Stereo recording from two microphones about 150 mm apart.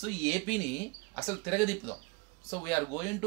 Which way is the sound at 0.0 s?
10° left (ahead or behind).